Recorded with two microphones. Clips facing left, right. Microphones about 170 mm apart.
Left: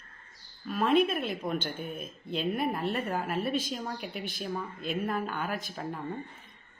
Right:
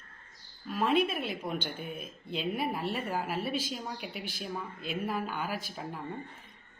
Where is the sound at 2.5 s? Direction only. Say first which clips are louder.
Left 2 dB; centre (ahead or behind).